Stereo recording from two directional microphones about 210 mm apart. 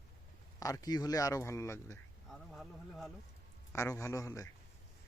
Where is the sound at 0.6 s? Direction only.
15° left (ahead or behind).